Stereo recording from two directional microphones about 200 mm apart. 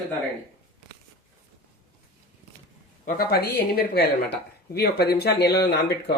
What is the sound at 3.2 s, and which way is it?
Speech, 50° left (ahead or behind).